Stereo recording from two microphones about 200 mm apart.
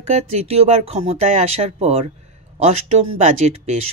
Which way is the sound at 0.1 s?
30° right (ahead or behind).